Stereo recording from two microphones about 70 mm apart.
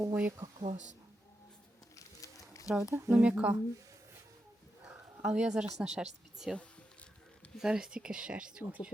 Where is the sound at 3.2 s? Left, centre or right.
Centre.